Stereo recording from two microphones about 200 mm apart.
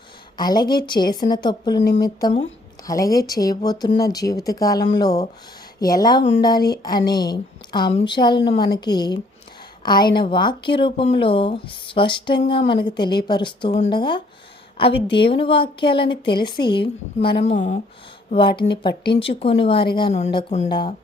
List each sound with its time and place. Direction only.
0.3 s a woman's voice: 20° left (ahead or behind)